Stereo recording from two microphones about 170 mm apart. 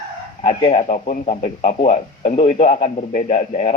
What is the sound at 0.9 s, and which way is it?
Speech, 50° left (ahead or behind).